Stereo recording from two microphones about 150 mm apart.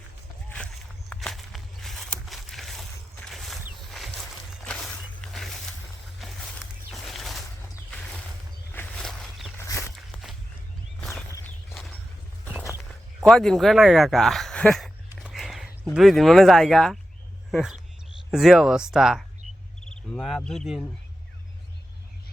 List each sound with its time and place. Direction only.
1.1 s walk: centre (ahead or behind)
4.6 s a sound: 5° left (ahead or behind)
9.6 s walk: 20° left (ahead or behind)
9.9 s walk: centre (ahead or behind)
13.1 s speech: centre (ahead or behind)
15.3 s a sound: centre (ahead or behind)
15.8 s speech: 5° right (ahead or behind)